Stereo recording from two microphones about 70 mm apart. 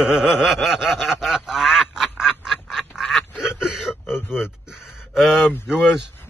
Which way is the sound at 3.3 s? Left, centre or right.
Centre.